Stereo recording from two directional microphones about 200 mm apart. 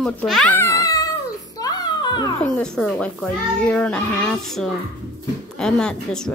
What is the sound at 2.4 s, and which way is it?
A child's voice, 5° left (ahead or behind).